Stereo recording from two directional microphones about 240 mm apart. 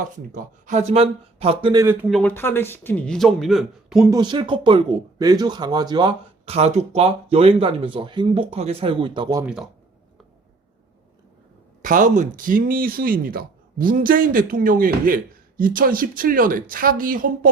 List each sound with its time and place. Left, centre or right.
0.3 s a man's voice: right; by 4.1 s centre
4.1 s speech: centre
11.8 s a woman's voice: right